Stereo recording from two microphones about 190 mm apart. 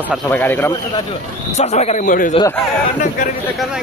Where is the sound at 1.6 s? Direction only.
35° left (ahead or behind).